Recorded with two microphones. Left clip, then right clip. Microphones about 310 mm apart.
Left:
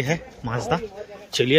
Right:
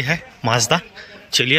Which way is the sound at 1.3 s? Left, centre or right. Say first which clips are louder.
Right 4 dB; centre.